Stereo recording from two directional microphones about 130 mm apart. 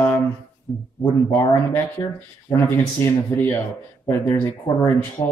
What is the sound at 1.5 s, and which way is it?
Speech, 10° left (ahead or behind).